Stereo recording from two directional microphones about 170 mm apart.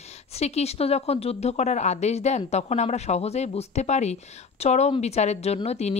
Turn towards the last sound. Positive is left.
turn(degrees=40)  # may be behind; listen again after turning